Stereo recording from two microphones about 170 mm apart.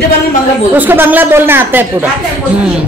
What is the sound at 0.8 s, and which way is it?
A man's voice, 10° right (ahead or behind).